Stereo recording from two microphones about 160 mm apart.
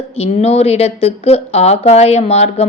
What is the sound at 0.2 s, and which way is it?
A woman's voice, 40° left (ahead or behind).